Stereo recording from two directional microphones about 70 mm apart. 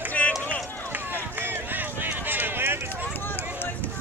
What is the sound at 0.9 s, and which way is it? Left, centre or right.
Run, right.